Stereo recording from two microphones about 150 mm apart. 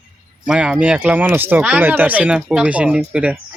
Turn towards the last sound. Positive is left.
turn(degrees=-10)  # may be behind; listen again after turning